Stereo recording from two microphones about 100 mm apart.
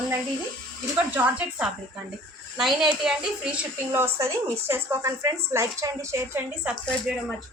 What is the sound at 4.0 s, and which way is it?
Speech, 30° right (ahead or behind).